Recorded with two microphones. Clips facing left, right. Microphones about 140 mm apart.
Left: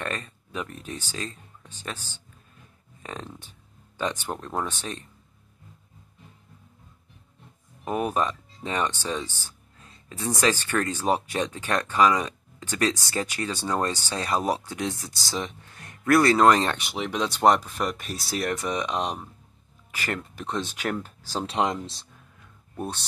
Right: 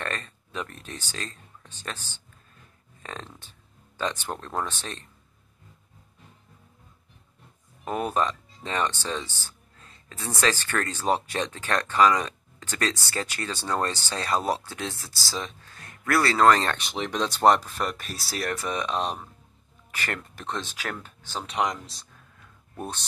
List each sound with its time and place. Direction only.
0.0 s speech: 10° left (ahead or behind)
7.8 s speech: 10° left (ahead or behind)
17.9 s speech: 15° left (ahead or behind)
21.0 s speech: 35° left (ahead or behind)
22.8 s speech: 10° left (ahead or behind)